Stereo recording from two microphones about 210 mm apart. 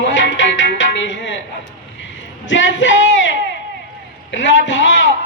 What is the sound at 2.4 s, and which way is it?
Speech, 60° left (ahead or behind).